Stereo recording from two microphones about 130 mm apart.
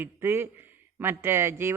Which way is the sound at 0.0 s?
15° right (ahead or behind).